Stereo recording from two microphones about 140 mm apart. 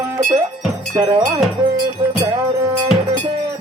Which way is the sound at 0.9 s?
40° right (ahead or behind).